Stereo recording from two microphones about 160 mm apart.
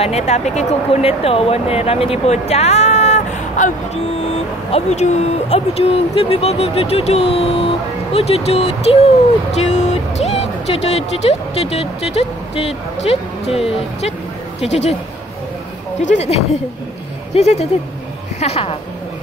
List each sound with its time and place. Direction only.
0.0 s speech: 40° left (ahead or behind)
14.6 s speech: 45° left (ahead or behind)
16.0 s speech: 45° left (ahead or behind)